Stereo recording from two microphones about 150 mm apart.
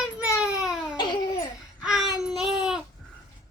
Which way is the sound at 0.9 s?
30° left (ahead or behind).